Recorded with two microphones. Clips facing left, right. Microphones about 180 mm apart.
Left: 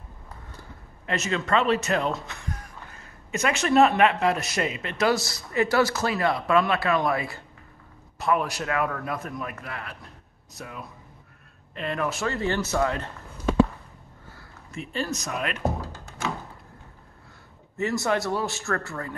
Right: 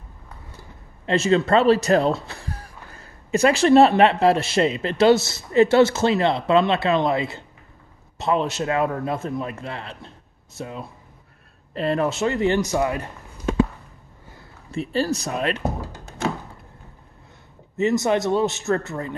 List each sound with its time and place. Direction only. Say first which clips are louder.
1.0 s a man's voice: right 9 dB; 30° right (ahead or behind); by 13.1 s 10° right (ahead or behind)
14.7 s speech: right 7 dB; 35° right (ahead or behind)
17.7 s a man's voice: right 5 dB; 20° right (ahead or behind)